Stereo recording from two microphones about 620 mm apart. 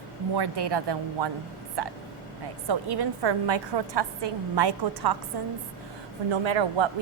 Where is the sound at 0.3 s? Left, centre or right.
Right.